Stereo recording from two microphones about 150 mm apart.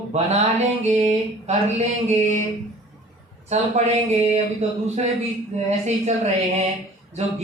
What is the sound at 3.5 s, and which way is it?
Speech, 45° right (ahead or behind).